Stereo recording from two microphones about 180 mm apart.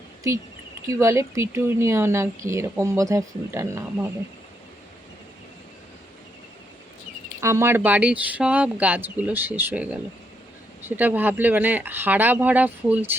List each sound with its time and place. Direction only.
0.9 s speech: 15° right (ahead or behind)
7.4 s speech: 15° right (ahead or behind)